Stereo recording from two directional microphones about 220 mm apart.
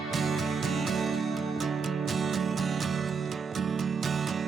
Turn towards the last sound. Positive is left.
turn(degrees=0)  # may be behind; listen again after turning